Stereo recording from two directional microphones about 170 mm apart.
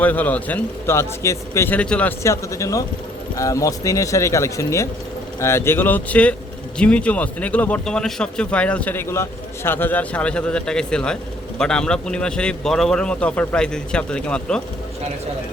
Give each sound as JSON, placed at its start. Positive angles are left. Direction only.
{"t": 0.0, "sound": "a man's voice", "side_deg": 10}